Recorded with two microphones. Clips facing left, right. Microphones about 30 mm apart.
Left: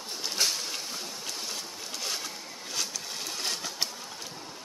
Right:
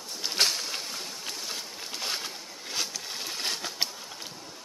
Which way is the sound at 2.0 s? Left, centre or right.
Right.